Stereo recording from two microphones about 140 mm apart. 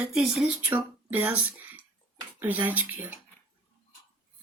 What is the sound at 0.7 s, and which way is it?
Speech, 10° right (ahead or behind).